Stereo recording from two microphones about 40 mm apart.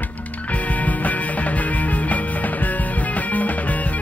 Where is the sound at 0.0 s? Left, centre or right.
Left.